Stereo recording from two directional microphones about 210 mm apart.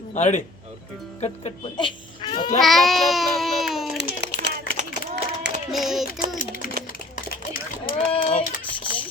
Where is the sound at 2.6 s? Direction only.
Centre (ahead or behind).